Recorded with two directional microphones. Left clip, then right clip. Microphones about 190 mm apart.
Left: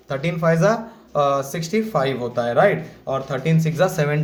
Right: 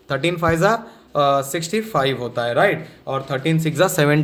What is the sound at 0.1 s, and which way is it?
A woman's voice, 30° right (ahead or behind).